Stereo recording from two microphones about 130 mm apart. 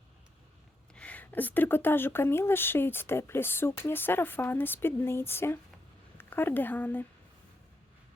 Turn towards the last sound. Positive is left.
turn(degrees=15)  # may be behind; listen again after turning